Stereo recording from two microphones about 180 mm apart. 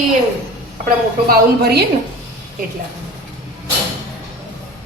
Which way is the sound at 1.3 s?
65° right (ahead or behind).